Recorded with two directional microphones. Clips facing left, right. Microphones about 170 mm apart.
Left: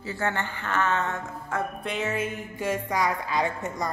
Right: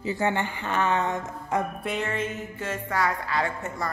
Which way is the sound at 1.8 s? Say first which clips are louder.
Even; centre (ahead or behind).